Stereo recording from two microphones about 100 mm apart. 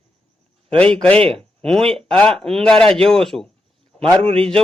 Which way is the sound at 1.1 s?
75° right (ahead or behind).